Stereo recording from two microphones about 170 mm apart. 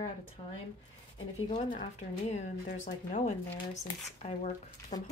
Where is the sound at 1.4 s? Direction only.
30° left (ahead or behind).